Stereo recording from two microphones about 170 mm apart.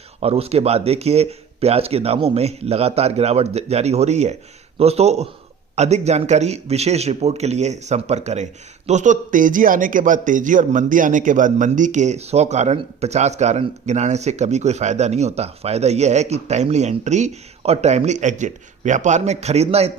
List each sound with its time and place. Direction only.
0.2 s a man's voice: 35° right (ahead or behind)